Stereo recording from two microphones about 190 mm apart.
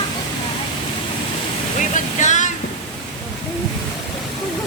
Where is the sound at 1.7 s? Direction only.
40° left (ahead or behind).